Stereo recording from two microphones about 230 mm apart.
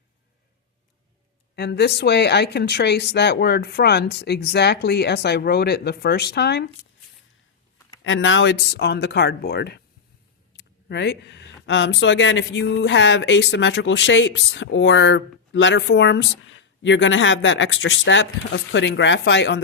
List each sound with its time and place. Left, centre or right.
1.5 s speech: left
8.0 s speech: left